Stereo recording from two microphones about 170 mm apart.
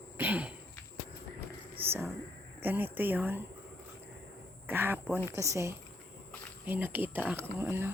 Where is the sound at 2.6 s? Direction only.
10° right (ahead or behind).